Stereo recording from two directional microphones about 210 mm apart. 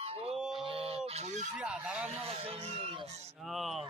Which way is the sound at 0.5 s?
25° right (ahead or behind).